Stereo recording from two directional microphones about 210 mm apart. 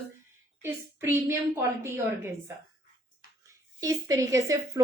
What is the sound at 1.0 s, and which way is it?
A woman's voice, 10° right (ahead or behind).